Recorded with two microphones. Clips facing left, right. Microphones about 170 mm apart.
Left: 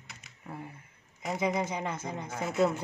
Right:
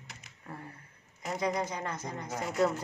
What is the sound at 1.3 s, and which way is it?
Speech, 20° left (ahead or behind).